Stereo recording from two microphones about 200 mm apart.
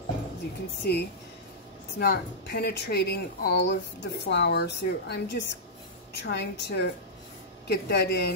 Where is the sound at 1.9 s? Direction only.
55° left (ahead or behind).